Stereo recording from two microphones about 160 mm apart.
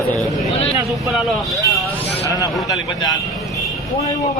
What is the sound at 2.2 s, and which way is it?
Speech, 20° left (ahead or behind).